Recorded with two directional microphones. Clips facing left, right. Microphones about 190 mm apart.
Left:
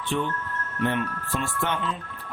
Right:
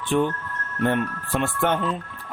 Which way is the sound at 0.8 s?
50° right (ahead or behind).